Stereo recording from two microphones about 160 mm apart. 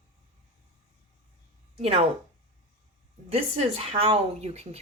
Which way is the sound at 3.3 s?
40° right (ahead or behind).